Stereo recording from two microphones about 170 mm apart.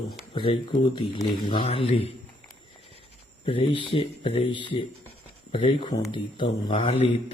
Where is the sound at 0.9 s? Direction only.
30° left (ahead or behind).